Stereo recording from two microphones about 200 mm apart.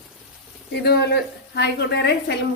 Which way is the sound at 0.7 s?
55° left (ahead or behind).